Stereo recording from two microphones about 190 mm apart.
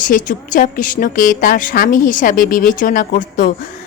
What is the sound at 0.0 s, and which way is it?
Speech, 45° left (ahead or behind).